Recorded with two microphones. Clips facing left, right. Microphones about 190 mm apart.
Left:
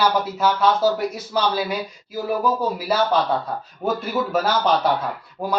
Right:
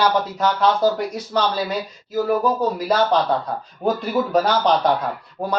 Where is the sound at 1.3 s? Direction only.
10° left (ahead or behind).